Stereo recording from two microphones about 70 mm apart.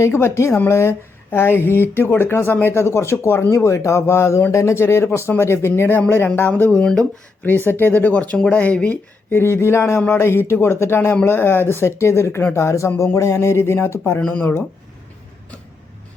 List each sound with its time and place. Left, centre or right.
0.0 s speech: left
6.6 s speech: centre
7.4 s speech: left
9.3 s speech: left
14.2 s speech: centre